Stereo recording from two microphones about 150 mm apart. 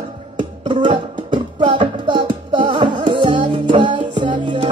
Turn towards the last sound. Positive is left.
turn(degrees=-30)  # may be behind; listen again after turning